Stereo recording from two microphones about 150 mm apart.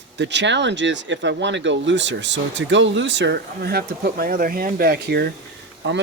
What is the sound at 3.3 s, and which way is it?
Speech, 90° right.